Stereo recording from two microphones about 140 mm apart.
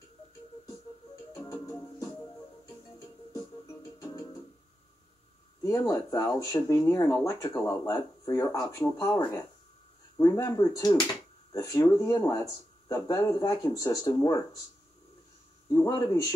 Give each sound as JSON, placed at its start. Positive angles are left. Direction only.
{"t": 1.3, "sound": "music", "side_deg": 20}
{"t": 4.0, "sound": "music", "side_deg": 20}
{"t": 5.6, "sound": "speech", "side_deg": 25}
{"t": 15.7, "sound": "speech", "side_deg": 25}